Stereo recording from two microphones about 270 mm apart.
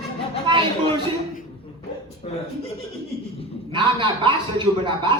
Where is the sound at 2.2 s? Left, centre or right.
Left.